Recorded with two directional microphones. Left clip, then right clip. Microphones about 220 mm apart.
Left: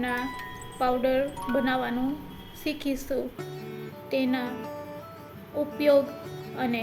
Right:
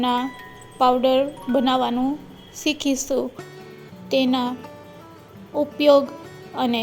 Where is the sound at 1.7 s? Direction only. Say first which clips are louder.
Right 7 dB; 30° right (ahead or behind).